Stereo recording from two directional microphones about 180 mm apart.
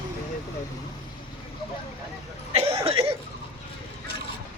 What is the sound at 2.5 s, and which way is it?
Cough, 35° right (ahead or behind).